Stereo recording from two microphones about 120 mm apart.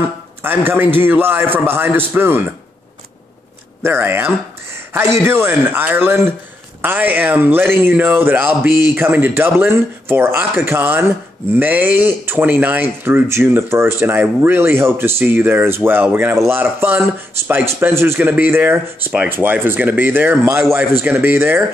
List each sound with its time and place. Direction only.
0.4 s speech: 15° right (ahead or behind)
3.8 s speech: 20° right (ahead or behind)